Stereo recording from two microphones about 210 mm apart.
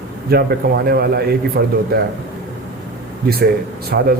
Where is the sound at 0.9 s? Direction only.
50° right (ahead or behind).